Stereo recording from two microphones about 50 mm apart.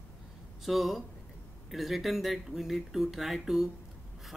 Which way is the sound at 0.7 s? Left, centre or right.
Centre.